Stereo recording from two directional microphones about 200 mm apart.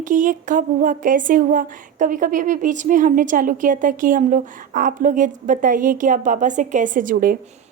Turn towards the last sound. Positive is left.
turn(degrees=-45)  # may be behind; listen again after turning